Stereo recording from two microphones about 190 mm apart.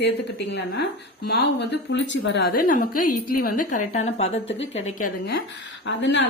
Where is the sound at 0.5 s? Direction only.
60° left (ahead or behind).